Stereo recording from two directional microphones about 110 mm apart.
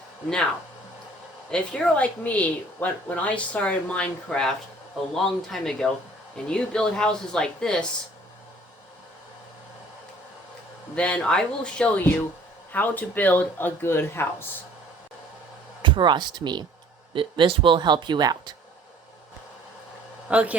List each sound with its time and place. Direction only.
1.5 s speech: 10° left (ahead or behind)
10.9 s speech: 10° left (ahead or behind)
15.8 s speech: 45° right (ahead or behind)
20.2 s a man's voice: 10° right (ahead or behind)